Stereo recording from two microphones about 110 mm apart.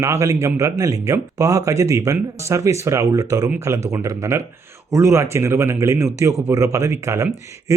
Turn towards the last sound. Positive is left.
turn(degrees=-25)  # may be behind; listen again after turning